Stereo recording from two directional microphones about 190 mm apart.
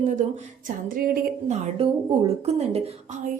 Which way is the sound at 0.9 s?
50° right (ahead or behind).